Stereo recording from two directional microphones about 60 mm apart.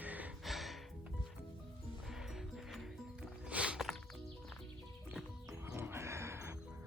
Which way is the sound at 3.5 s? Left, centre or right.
Centre.